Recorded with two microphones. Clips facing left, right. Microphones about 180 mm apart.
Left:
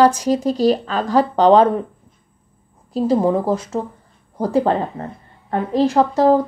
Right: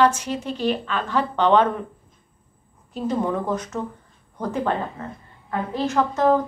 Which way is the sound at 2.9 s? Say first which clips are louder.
Left 7 dB; 35° left (ahead or behind).